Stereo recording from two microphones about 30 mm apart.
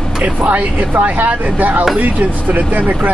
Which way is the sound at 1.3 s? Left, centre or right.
Right.